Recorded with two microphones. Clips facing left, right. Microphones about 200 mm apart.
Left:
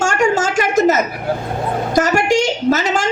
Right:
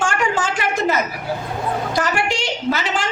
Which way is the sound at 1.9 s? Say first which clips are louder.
Left 11 dB; 45° left (ahead or behind).